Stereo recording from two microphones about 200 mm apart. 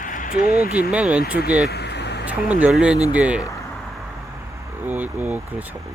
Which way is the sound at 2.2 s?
10° right (ahead or behind).